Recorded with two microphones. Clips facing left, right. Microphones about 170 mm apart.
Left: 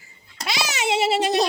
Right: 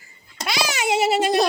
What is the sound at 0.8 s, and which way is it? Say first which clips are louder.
Speech: even; 25° left (ahead or behind).